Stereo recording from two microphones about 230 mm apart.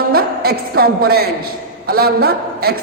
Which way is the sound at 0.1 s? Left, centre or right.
Right.